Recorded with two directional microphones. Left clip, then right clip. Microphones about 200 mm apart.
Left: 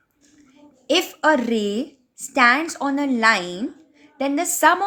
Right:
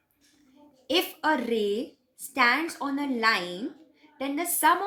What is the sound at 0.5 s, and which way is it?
A woman's voice, 55° left (ahead or behind).